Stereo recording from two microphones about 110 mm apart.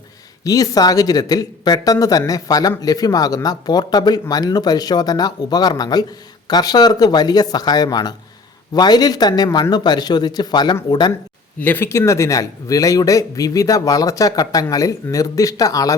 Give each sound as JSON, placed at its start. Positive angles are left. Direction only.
{"t": 0.4, "sound": "speech", "side_deg": 30}
{"t": 11.6, "sound": "speech", "side_deg": 20}